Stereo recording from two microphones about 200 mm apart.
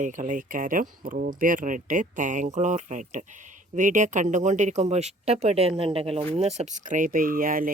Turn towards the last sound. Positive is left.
turn(degrees=-45)  # may be behind; listen again after turning